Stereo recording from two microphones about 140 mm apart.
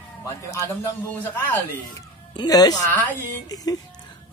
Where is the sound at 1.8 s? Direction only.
30° left (ahead or behind).